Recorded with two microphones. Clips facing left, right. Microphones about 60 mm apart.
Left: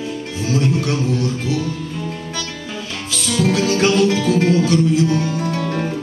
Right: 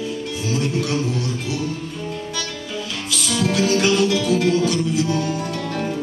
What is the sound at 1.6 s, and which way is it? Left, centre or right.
Music, left.